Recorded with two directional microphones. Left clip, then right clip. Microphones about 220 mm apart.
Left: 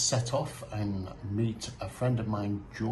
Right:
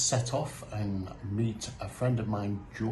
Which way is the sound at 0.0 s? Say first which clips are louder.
Even; 5° left (ahead or behind).